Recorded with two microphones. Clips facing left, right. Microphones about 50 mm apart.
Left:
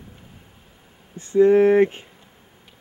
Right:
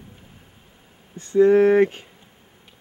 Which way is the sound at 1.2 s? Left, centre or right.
Left.